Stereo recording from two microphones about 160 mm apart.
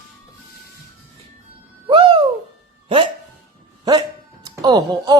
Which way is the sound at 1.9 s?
30° right (ahead or behind).